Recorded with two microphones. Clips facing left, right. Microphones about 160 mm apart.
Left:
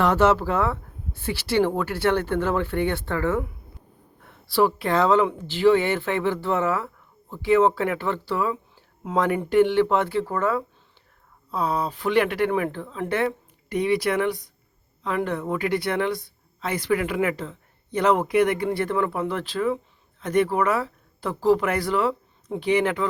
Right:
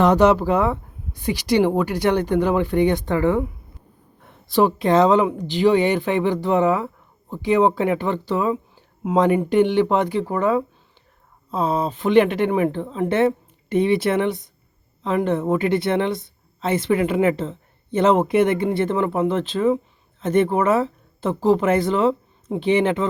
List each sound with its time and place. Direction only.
0.0 s speech: 20° right (ahead or behind)
4.4 s a woman's voice: 20° right (ahead or behind)